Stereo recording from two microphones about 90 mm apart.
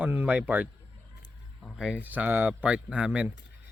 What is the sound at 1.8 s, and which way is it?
Speech, 10° right (ahead or behind).